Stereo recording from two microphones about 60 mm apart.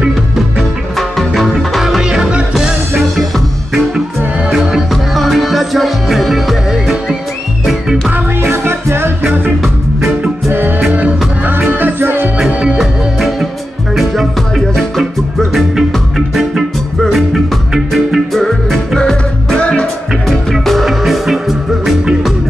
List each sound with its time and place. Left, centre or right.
0.9 s music: centre
2.0 s music: centre
4.5 s music: centre
8.1 s music: right
11.0 s music: right
12.4 s music: centre
14.8 s music: centre
17.0 s music: centre
19.6 s music: centre
20.5 s music: centre